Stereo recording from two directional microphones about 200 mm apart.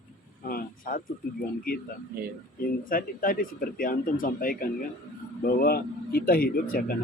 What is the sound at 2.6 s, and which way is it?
Speech, 45° left (ahead or behind).